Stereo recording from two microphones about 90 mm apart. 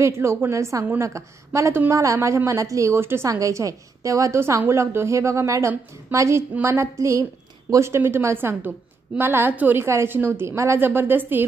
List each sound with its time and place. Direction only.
0.0 s a woman's voice: 30° right (ahead or behind)
3.3 s a woman's voice: 40° right (ahead or behind); by 11.4 s 20° right (ahead or behind)